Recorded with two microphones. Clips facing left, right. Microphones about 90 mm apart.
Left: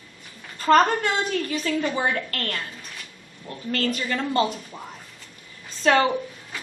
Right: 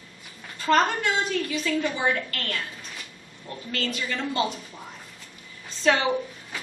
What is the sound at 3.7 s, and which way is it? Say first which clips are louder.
Speech: left 4 dB; 45° left (ahead or behind).